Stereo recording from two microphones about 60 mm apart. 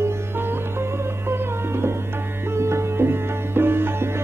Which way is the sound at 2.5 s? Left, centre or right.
Right.